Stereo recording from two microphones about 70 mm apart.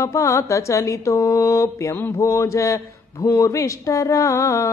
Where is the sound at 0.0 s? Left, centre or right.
Left.